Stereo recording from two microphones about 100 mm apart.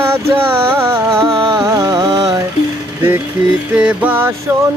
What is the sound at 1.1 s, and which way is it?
Music, 30° right (ahead or behind).